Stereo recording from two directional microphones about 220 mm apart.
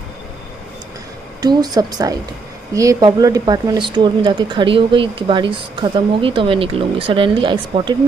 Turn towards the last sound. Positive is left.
turn(degrees=-20)  # may be behind; listen again after turning